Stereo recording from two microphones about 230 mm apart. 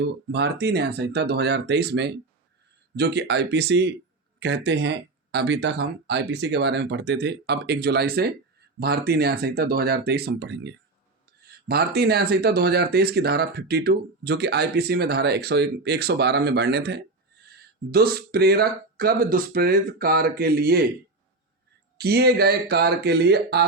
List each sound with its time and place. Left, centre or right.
0.0 s speech: right
21.9 s speech: right